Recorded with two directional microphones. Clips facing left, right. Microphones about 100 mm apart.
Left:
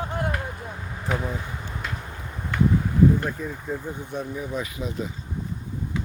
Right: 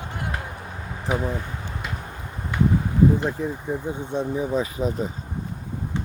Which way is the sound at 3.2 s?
25° right (ahead or behind).